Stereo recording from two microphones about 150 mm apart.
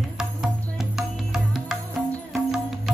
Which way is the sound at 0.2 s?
5° right (ahead or behind).